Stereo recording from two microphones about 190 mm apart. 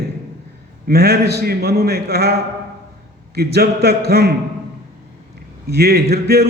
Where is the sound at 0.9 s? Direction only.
55° right (ahead or behind).